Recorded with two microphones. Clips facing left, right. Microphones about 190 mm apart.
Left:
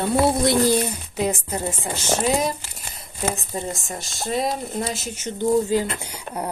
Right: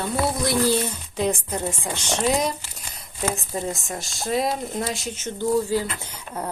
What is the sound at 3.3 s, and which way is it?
Speech, centre (ahead or behind).